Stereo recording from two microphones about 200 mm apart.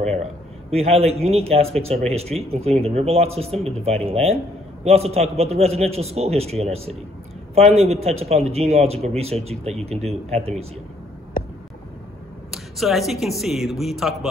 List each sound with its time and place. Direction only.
0.0 s a sound: 35° right (ahead or behind)
1.2 s a man's voice: 30° right (ahead or behind)
12.4 s speech: centre (ahead or behind)